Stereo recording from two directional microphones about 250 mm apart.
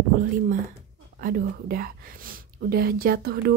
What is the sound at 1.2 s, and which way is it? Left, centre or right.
A woman's voice, right.